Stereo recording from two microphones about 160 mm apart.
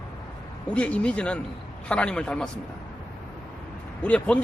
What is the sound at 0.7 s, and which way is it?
Speech, 5° left (ahead or behind).